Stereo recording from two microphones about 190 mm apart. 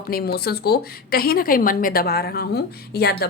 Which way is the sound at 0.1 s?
55° left (ahead or behind).